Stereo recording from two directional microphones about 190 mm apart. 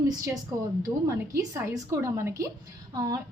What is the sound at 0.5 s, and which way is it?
A woman's voice, 15° right (ahead or behind).